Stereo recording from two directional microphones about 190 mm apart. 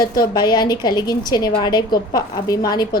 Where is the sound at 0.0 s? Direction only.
50° left (ahead or behind).